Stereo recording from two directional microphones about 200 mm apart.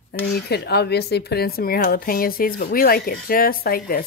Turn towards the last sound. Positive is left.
turn(degrees=45)  # may be behind; listen again after turning